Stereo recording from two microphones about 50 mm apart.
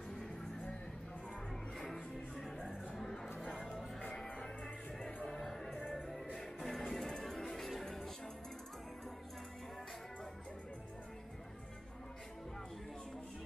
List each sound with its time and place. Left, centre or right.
0.1 s music: centre
2.3 s music: centre
5.0 s music: centre